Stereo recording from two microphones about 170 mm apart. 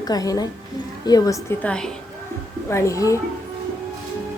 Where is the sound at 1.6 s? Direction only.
5° left (ahead or behind).